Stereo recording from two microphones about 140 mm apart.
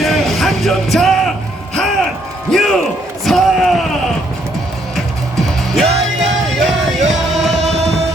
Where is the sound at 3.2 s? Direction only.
Centre (ahead or behind).